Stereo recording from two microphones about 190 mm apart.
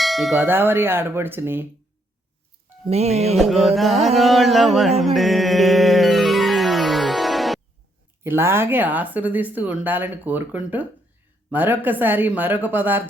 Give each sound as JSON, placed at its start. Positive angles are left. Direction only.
{"t": 0.0, "sound": "tubular bells", "side_deg": 0}
{"t": 0.3, "sound": "speech", "side_deg": -10}
{"t": 2.9, "sound": "speech", "side_deg": -35}
{"t": 3.3, "sound": "carnatic music", "side_deg": 0}
{"t": 4.9, "sound": "music", "side_deg": 0}
{"t": 8.2, "sound": "speech", "side_deg": -10}